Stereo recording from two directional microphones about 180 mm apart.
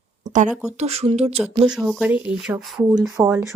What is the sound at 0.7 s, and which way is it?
Speech, 35° right (ahead or behind).